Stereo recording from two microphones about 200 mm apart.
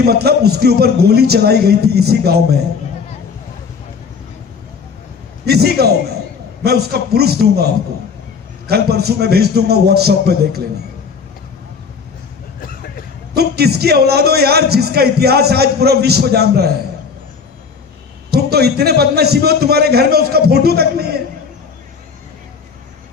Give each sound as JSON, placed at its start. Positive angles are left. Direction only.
{"t": 0.0, "sound": "speech", "side_deg": -50}
{"t": 5.5, "sound": "speech", "side_deg": -55}
{"t": 13.3, "sound": "speech", "side_deg": -55}
{"t": 18.3, "sound": "speech", "side_deg": -55}